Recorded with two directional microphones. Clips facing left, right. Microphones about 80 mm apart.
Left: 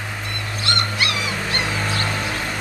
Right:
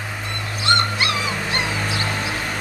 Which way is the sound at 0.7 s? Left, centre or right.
Right.